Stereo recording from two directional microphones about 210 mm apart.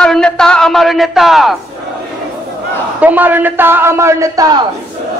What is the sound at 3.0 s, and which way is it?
A man's voice, 10° right (ahead or behind).